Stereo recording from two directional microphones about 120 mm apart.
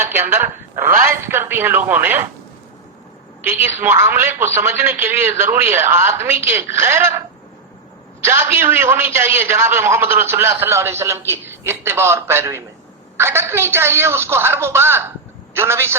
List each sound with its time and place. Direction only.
0.0 s a sound: 20° right (ahead or behind)
1.0 s speech: 20° right (ahead or behind)
3.4 s a man's voice: 20° right (ahead or behind)
8.2 s a man's voice: 20° right (ahead or behind)